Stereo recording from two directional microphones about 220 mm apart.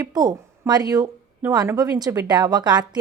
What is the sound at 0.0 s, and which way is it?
A woman's voice, 15° right (ahead or behind).